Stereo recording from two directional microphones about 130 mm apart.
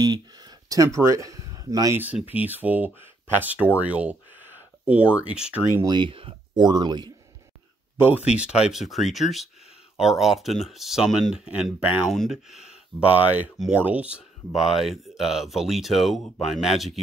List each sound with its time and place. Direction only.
0.0 s a sound: 30° right (ahead or behind)
2.0 s speech: 15° right (ahead or behind)
5.9 s speech: 40° right (ahead or behind)
8.0 s speech: 15° right (ahead or behind)